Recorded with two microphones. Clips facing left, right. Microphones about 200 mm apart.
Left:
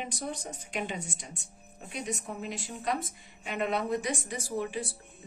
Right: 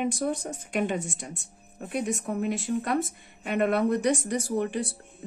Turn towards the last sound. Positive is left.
turn(degrees=-55)  # may be behind; listen again after turning